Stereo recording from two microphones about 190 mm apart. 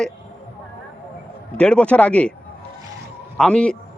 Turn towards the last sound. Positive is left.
turn(degrees=5)  # may be behind; listen again after turning